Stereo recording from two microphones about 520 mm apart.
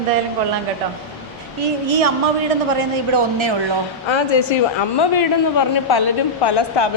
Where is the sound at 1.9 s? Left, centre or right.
Right.